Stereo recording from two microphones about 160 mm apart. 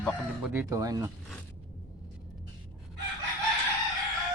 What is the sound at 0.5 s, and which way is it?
Speech, 20° right (ahead or behind).